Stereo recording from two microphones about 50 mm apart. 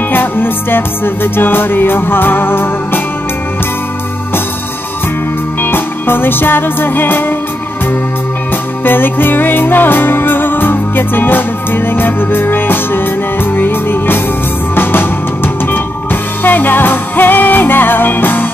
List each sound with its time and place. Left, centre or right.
0.1 s music: left
5.6 s music: left
8.8 s music: left